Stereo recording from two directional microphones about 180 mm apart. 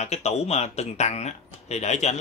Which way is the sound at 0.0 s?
35° left (ahead or behind).